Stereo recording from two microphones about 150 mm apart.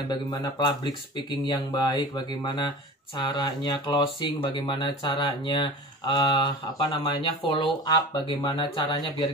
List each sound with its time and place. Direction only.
0.3 s speech: 30° left (ahead or behind)